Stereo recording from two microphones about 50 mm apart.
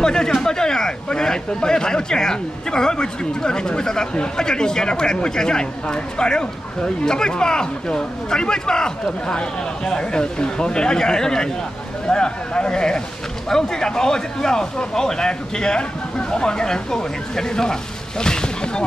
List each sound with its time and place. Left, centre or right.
0.0 s speech: centre